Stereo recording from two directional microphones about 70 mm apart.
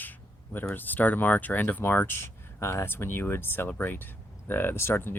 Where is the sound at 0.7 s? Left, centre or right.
Left.